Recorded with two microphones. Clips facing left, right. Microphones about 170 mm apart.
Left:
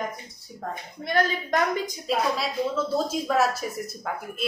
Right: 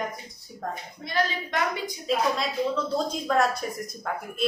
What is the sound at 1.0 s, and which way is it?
Speech, 45° left (ahead or behind).